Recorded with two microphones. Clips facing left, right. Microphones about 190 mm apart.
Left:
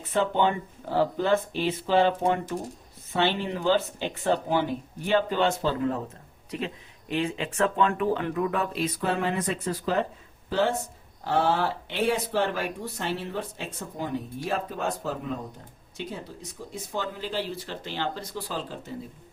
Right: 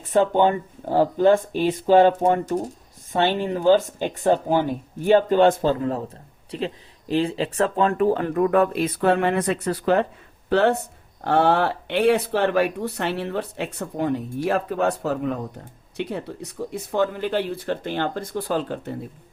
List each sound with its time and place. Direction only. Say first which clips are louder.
0.1 s speech: right 6 dB; 45° right (ahead or behind); by 18.9 s 60° right (ahead or behind)